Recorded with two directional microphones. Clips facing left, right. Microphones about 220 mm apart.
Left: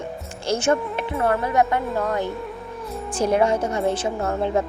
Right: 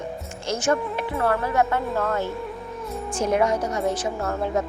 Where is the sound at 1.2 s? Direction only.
20° left (ahead or behind).